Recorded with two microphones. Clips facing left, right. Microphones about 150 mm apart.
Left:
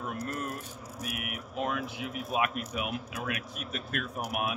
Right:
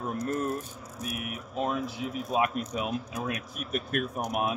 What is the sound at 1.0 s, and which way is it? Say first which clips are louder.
Speech: right 3 dB; 30° right (ahead or behind).